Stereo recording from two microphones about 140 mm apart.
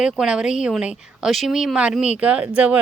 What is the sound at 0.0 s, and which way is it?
Speech, 5° right (ahead or behind).